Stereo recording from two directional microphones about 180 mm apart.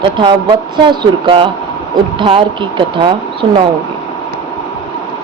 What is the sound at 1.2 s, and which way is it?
Speech, 30° right (ahead or behind).